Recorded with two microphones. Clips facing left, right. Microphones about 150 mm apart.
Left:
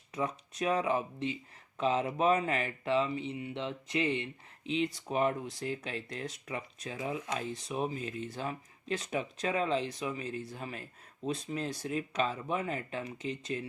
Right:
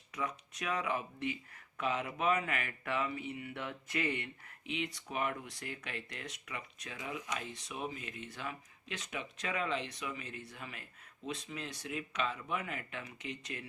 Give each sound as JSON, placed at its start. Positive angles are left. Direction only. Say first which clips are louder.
{"t": 0.1, "sound": "speech", "louder": "left 5 dB", "side_deg": 30}